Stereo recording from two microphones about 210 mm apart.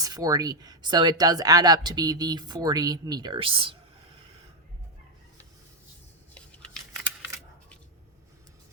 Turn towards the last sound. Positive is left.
turn(degrees=5)  # may be behind; listen again after turning